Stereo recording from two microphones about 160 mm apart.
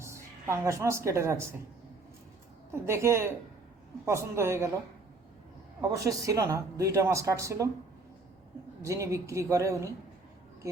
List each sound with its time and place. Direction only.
0.0 s a woman's voice: 15° right (ahead or behind)
2.7 s a woman's voice: 15° right (ahead or behind)
5.9 s speech: 20° right (ahead or behind)
8.8 s speech: 20° right (ahead or behind)